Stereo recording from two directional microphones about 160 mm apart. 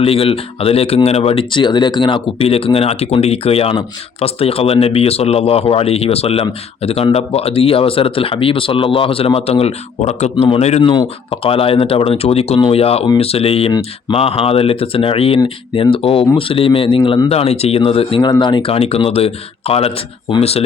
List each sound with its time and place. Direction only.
0.0 s speech: 35° left (ahead or behind)